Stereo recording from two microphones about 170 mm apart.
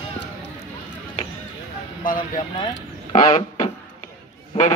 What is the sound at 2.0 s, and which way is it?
Speech, 55° left (ahead or behind).